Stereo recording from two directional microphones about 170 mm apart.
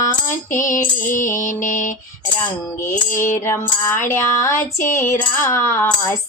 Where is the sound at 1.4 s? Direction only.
50° left (ahead or behind).